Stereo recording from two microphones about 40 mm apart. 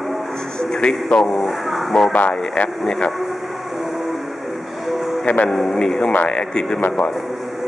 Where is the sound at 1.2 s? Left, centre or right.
Centre.